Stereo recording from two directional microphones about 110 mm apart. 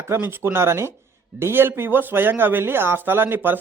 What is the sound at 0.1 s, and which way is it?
Speech, 20° right (ahead or behind).